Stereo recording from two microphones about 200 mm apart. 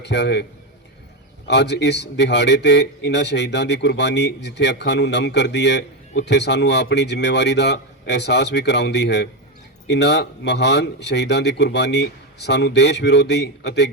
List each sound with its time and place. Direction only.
0.0 s speech: 60° left (ahead or behind)
1.5 s speech: 60° left (ahead or behind)